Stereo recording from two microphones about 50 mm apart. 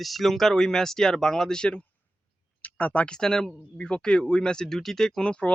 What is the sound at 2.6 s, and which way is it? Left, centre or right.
Speech, left.